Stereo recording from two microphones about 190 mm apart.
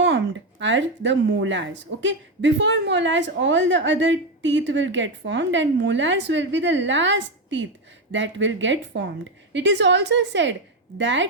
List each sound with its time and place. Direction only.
0.6 s a woman's voice: 75° right (ahead or behind)